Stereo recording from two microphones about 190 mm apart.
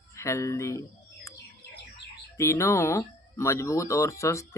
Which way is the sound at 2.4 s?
15° left (ahead or behind).